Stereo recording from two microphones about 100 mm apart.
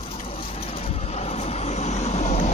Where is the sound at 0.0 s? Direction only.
65° left (ahead or behind).